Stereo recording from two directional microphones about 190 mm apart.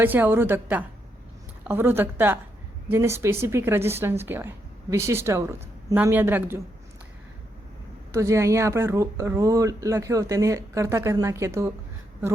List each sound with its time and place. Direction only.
0.0 s speech: 10° right (ahead or behind)
8.1 s speech: 15° right (ahead or behind)